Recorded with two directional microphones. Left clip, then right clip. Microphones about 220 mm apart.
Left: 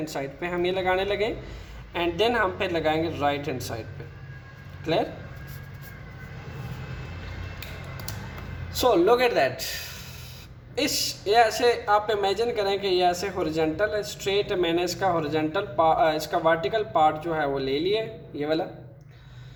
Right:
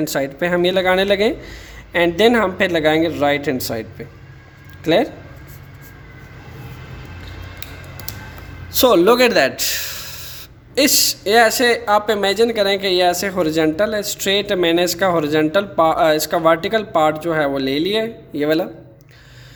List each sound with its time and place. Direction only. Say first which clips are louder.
0.0 s a man's voice: right 11 dB; 50° right (ahead or behind)
8.7 s a man's voice: right 8 dB; 50° right (ahead or behind)